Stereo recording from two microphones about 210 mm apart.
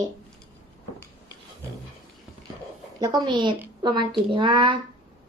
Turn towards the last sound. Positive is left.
turn(degrees=-20)  # may be behind; listen again after turning